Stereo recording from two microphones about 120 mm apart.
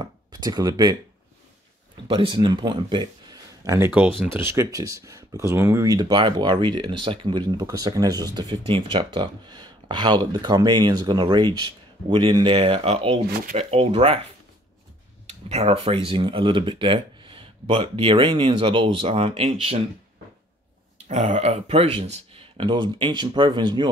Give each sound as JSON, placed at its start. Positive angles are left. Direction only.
{"t": 0.0, "sound": "a sound", "side_deg": -30}
{"t": 2.0, "sound": "speech", "side_deg": -40}
{"t": 3.9, "sound": "speech", "side_deg": -15}
{"t": 15.4, "sound": "speech", "side_deg": -60}
{"t": 21.3, "sound": "speech", "side_deg": -60}